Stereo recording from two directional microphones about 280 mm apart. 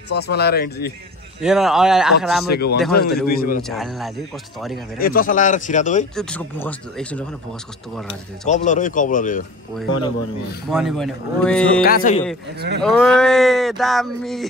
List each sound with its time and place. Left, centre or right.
0.1 s speech: left
1.4 s speech: centre
2.4 s speech: left
3.6 s speech: centre
4.9 s speech: left
6.1 s speech: centre
8.1 s speech: left
10.7 s speech: centre
11.8 s speech: left
12.4 s speech: right
12.8 s speech: centre